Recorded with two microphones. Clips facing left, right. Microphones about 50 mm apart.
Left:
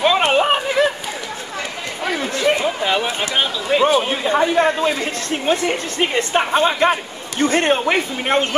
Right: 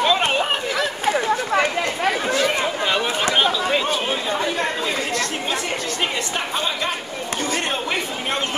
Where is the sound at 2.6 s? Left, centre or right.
Centre.